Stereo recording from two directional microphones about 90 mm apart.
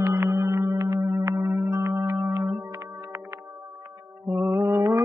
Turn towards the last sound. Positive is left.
turn(degrees=-30)  # may be behind; listen again after turning